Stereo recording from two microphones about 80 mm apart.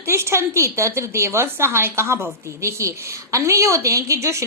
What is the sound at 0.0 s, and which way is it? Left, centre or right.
A woman's voice, right.